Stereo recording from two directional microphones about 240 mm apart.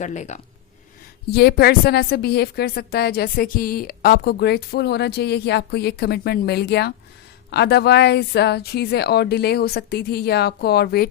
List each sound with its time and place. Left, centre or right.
0.0 s a woman's voice: left
1.3 s a woman's voice: left